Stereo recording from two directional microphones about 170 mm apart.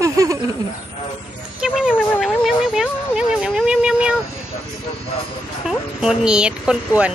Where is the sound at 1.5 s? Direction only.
5° right (ahead or behind).